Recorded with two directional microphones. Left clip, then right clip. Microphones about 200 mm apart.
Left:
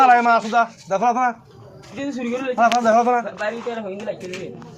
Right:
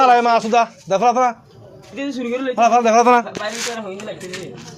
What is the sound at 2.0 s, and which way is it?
Speech, 50° right (ahead or behind).